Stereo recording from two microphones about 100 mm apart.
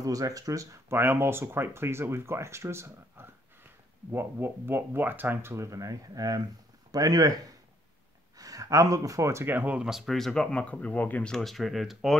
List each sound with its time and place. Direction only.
0.0 s speech: 35° right (ahead or behind); by 11.3 s 15° left (ahead or behind)
11.3 s speech: centre (ahead or behind)